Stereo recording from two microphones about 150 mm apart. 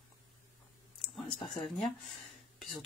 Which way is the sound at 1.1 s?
Centre (ahead or behind).